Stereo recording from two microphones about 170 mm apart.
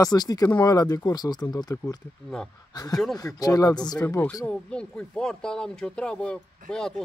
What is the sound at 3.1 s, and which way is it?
Speech, 20° left (ahead or behind).